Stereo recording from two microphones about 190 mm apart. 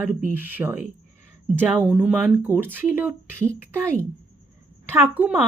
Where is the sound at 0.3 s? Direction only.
10° right (ahead or behind).